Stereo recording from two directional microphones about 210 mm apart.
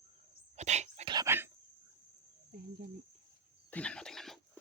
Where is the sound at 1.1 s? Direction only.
15° right (ahead or behind).